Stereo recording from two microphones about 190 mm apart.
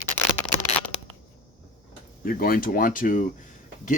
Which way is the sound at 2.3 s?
50° left (ahead or behind).